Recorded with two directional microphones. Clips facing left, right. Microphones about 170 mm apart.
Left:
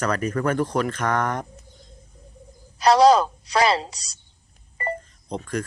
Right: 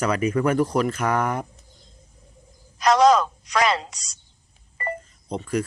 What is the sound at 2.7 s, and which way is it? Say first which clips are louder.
A woman's voice: left 2 dB; 35° left (ahead or behind).